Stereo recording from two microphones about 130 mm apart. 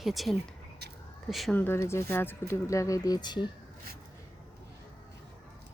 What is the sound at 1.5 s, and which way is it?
Speech, 20° left (ahead or behind).